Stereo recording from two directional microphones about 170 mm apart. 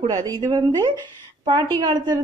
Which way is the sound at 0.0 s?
25° right (ahead or behind).